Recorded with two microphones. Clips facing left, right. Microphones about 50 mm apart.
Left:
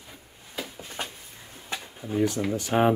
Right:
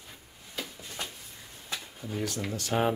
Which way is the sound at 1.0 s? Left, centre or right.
Left.